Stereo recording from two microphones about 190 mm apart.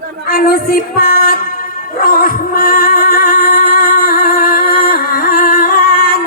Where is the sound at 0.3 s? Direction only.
55° left (ahead or behind).